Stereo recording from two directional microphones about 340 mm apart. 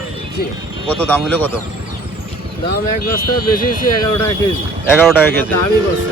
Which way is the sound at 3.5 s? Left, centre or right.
Left.